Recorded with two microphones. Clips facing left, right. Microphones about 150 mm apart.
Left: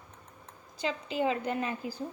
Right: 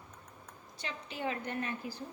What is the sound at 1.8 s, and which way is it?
Speech, 90° left.